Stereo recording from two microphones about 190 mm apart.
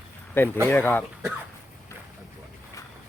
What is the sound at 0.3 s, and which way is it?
Speech, 10° left (ahead or behind).